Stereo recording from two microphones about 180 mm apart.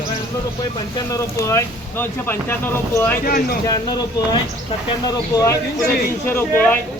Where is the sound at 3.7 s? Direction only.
25° left (ahead or behind).